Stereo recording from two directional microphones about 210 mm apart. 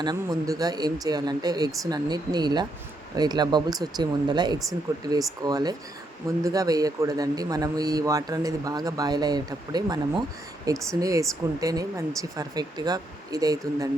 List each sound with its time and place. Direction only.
0.0 s a man's voice: 20° right (ahead or behind)